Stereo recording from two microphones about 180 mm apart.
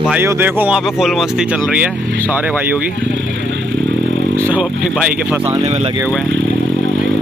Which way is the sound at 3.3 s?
90° right.